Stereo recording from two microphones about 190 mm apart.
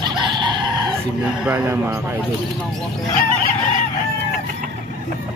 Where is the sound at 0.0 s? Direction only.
25° right (ahead or behind).